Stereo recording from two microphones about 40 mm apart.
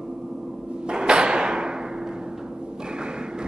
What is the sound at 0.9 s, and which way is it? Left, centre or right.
Thump, right.